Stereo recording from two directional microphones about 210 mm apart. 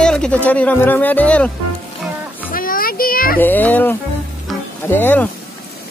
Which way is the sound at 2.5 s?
45° left (ahead or behind).